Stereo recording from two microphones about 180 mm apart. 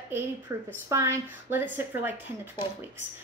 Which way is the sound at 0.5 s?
15° right (ahead or behind).